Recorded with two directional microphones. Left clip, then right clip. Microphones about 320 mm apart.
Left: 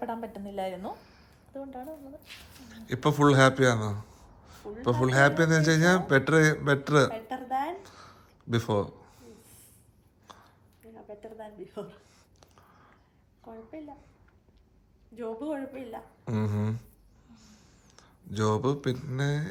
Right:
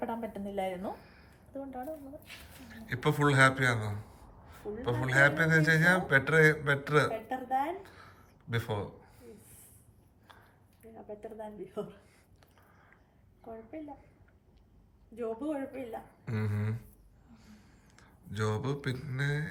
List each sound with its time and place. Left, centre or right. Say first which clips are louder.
0.0 s a woman's voice: left 1 dB; centre
10.3 s a sound: left 5 dB; centre
10.9 s speech: even; centre
13.4 s a woman's voice: even; centre
15.1 s speech: left 1 dB; centre
17.3 s a sound: left 1 dB; centre